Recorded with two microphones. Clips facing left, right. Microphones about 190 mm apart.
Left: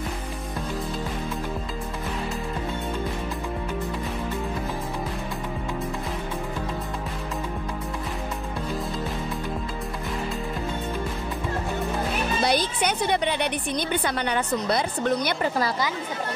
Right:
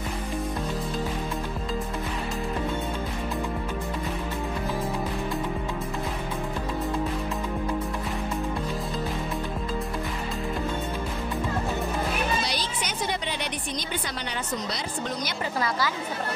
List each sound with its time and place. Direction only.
12.4 s a woman's voice: 55° left (ahead or behind)